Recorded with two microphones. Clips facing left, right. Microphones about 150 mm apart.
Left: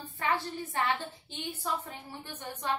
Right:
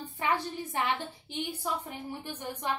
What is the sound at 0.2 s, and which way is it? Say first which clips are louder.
A woman's voice: right 1 dB; 20° right (ahead or behind).